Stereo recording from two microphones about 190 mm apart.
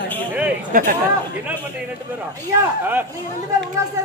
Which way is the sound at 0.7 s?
45° right (ahead or behind).